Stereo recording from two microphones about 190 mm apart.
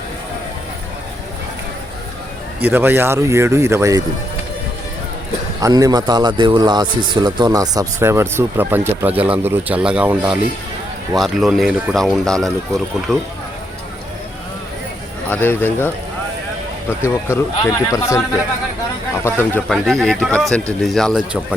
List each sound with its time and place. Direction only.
2.6 s speech: 10° right (ahead or behind)
5.5 s speech: 20° right (ahead or behind); by 13.2 s centre (ahead or behind)
15.3 s speech: 10° left (ahead or behind)
17.2 s speech: 15° left (ahead or behind)